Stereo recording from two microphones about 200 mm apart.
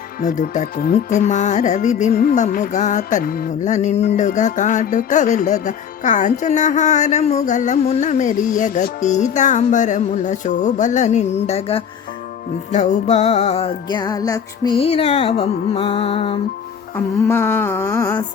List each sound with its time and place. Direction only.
0.2 s speech: 40° left (ahead or behind)
12.7 s music: 35° left (ahead or behind)
17.2 s a sound: 10° left (ahead or behind)